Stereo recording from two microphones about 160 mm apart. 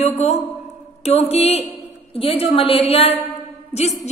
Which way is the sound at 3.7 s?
40° left (ahead or behind).